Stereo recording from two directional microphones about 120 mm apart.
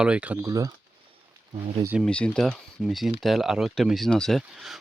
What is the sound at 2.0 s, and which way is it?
Speech, 10° left (ahead or behind).